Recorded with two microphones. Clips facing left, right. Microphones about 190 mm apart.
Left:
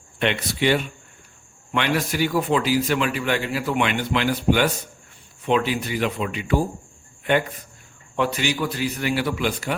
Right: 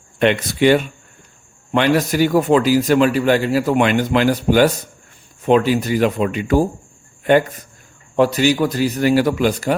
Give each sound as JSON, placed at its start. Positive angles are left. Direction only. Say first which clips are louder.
{"t": 0.2, "sound": "speech", "louder": "right 7 dB", "side_deg": -45}
{"t": 8.1, "sound": "speech", "louder": "right 8 dB", "side_deg": -40}